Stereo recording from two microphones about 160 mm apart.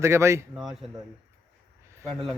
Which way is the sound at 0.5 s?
Centre (ahead or behind).